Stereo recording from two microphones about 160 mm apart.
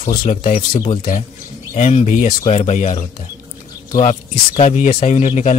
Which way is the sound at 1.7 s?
45° left (ahead or behind).